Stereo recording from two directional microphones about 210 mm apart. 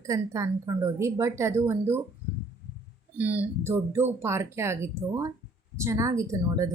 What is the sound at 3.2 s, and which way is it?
Speech, 5° right (ahead or behind).